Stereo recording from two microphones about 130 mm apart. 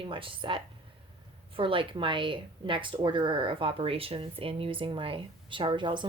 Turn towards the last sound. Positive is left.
turn(degrees=-35)  # may be behind; listen again after turning